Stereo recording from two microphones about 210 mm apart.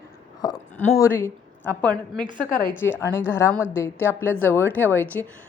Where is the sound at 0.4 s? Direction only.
20° left (ahead or behind).